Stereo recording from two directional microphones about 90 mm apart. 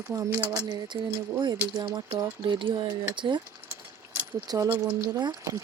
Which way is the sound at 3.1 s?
65° right (ahead or behind).